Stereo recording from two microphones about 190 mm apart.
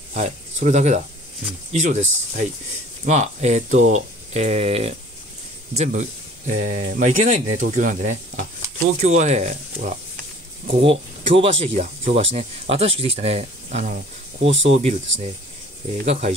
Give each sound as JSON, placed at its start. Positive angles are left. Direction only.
{"t": 0.1, "sound": "speech", "side_deg": -40}
{"t": 7.4, "sound": "speech", "side_deg": -90}
{"t": 7.7, "sound": "speech", "side_deg": -40}